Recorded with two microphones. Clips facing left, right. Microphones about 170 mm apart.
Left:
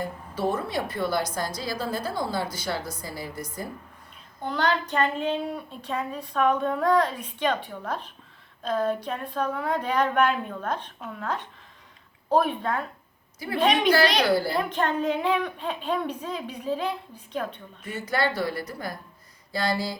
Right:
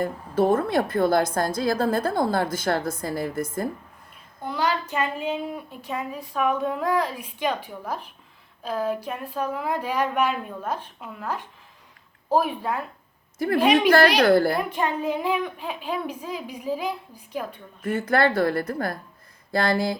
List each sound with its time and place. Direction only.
0.0 s a woman's voice: 50° right (ahead or behind)
4.4 s a woman's voice: 5° right (ahead or behind)
14.2 s a woman's voice: 55° right (ahead or behind)
14.7 s a woman's voice: 10° right (ahead or behind)
17.8 s a woman's voice: 55° right (ahead or behind)